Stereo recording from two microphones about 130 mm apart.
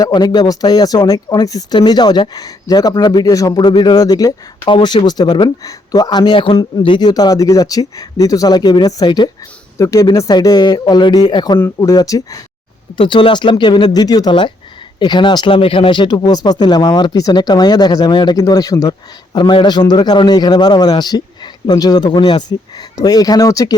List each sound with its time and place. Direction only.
0.0 s speech: 30° left (ahead or behind)
4.6 s speech: 40° left (ahead or behind)
13.0 s speech: 40° left (ahead or behind)
19.4 s speech: 35° left (ahead or behind)